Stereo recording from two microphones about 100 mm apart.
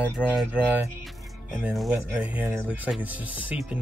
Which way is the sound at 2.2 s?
15° right (ahead or behind).